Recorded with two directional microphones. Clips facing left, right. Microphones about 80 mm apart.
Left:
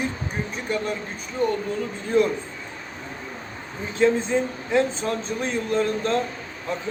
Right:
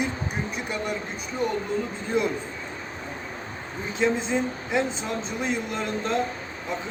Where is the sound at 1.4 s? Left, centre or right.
Centre.